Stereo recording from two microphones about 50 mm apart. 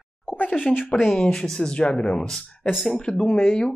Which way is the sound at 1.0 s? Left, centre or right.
Centre.